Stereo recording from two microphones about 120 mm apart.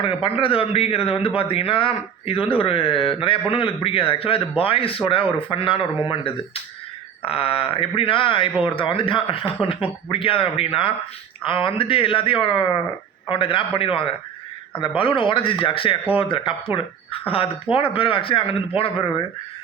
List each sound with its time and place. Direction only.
0.0 s a man's voice: 50° left (ahead or behind)